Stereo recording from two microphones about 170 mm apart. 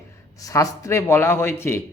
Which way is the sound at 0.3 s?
20° left (ahead or behind).